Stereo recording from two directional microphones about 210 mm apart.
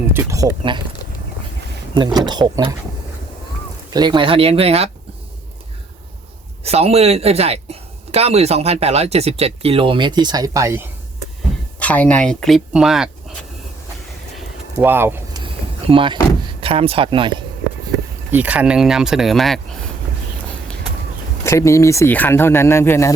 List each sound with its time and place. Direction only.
0.1 s speech: 10° right (ahead or behind)
2.0 s speech: 20° right (ahead or behind)
3.9 s speech: 20° right (ahead or behind)
6.7 s speech: 30° right (ahead or behind); by 10.8 s 15° right (ahead or behind)
11.8 s speech: 5° left (ahead or behind)
14.3 s a sound: 5° right (ahead or behind)
15.9 s speech: 25° right (ahead or behind)
18.3 s speech: 5° right (ahead or behind)
21.4 s speech: 15° left (ahead or behind)